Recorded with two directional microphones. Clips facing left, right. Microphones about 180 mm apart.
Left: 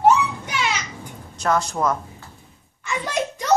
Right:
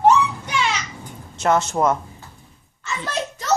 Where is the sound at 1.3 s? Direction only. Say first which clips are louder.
Right 3 dB; 25° right (ahead or behind).